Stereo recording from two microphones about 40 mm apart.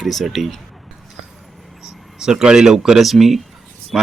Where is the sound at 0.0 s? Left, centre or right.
Centre.